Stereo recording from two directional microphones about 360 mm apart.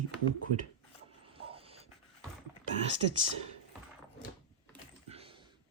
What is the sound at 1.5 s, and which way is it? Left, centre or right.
Dog, centre.